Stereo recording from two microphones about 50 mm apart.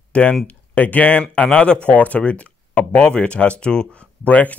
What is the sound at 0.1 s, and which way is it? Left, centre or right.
Speech, left.